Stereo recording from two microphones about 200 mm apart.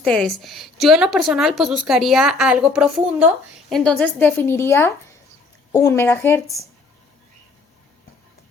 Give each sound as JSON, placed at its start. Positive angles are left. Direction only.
{"t": 0.0, "sound": "a woman's voice", "side_deg": 5}